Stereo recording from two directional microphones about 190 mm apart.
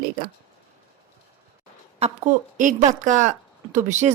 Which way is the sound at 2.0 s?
35° right (ahead or behind).